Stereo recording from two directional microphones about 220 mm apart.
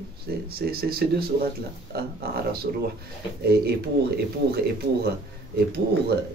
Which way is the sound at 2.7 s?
40° right (ahead or behind).